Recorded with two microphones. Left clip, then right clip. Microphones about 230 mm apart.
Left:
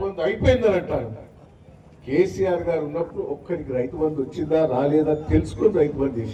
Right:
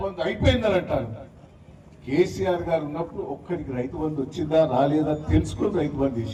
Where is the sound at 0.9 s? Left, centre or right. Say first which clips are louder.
Even; right.